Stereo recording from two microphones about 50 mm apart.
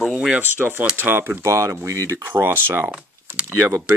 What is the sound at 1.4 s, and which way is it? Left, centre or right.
Speech, right.